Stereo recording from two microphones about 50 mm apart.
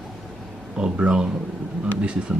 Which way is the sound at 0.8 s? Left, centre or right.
Right.